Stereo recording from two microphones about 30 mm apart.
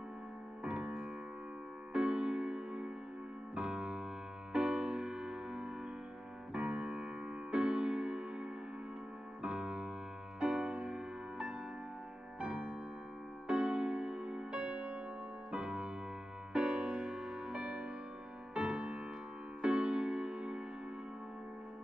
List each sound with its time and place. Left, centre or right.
0.7 s music: right
9.4 s piano: right
10.4 s music: right